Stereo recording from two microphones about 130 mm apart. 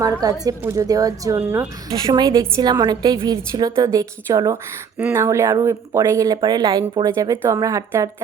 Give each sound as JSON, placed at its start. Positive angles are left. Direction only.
{"t": 0.0, "sound": "speech", "side_deg": -25}
{"t": 1.9, "sound": "a woman's voice", "side_deg": -30}